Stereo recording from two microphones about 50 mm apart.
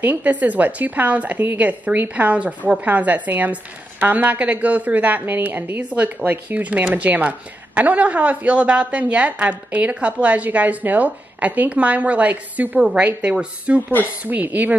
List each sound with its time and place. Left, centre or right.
0.0 s a woman's voice: right
5.2 s a woman's voice: right
5.9 s a woman's voice: right